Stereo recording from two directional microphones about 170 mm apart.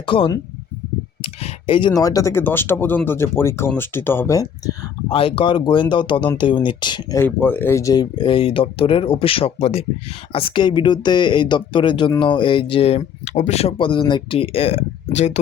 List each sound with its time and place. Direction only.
0.0 s speech: 30° left (ahead or behind)
5.1 s speech: 30° left (ahead or behind)
7.2 s speech: 10° left (ahead or behind); by 15.4 s 40° left (ahead or behind)